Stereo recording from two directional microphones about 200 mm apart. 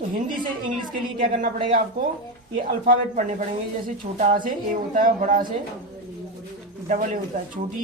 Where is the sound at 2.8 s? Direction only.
40° right (ahead or behind).